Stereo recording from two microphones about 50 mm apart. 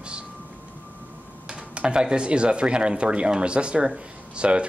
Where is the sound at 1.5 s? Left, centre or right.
Centre.